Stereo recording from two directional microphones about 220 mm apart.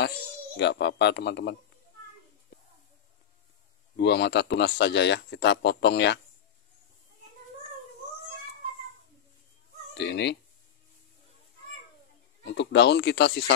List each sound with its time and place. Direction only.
0.6 s speech: 50° left (ahead or behind)
3.9 s speech: 50° left (ahead or behind)
9.9 s speech: 50° left (ahead or behind)
12.5 s speech: 50° left (ahead or behind)